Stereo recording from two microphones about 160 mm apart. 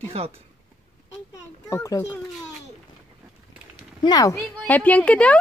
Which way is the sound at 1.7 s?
20° left (ahead or behind).